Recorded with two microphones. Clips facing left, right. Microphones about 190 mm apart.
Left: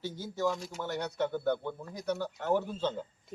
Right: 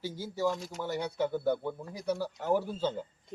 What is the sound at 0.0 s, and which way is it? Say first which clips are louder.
Speech: right 1 dB; 10° right (ahead or behind).